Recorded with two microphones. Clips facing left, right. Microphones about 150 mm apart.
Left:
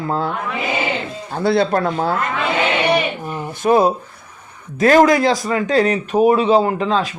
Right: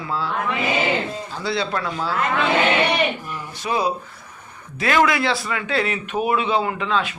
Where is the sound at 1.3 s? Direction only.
55° left (ahead or behind).